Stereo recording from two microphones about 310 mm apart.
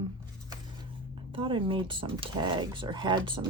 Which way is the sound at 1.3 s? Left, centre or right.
Centre.